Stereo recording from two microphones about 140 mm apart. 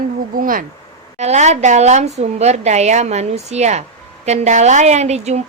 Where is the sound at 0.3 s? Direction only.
85° right.